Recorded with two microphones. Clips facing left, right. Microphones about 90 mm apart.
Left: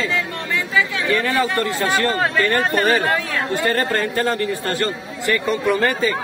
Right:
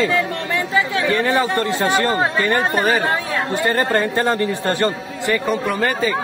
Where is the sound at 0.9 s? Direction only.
25° right (ahead or behind).